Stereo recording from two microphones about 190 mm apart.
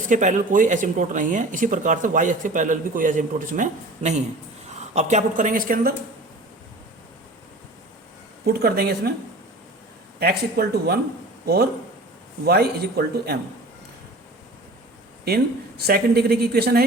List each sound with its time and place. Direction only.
0.1 s speech: 40° right (ahead or behind)
8.4 s speech: 55° right (ahead or behind)
10.2 s speech: 55° right (ahead or behind)
15.8 s speech: 55° right (ahead or behind)